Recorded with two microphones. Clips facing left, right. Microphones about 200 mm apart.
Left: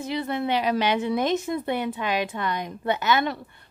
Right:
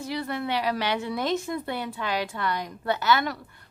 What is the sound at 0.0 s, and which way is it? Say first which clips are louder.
A woman's voice: left 3 dB; 20° left (ahead or behind).